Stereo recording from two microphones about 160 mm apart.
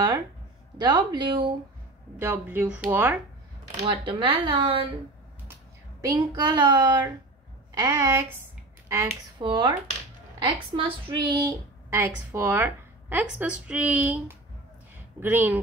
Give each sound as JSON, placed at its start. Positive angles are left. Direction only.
{"t": 0.7, "sound": "a woman's voice", "side_deg": -25}
{"t": 2.1, "sound": "a woman's voice", "side_deg": -15}
{"t": 3.8, "sound": "speech", "side_deg": -30}
{"t": 5.9, "sound": "a woman's voice", "side_deg": -25}
{"t": 8.8, "sound": "a sound", "side_deg": -20}
{"t": 9.4, "sound": "a woman's voice", "side_deg": -30}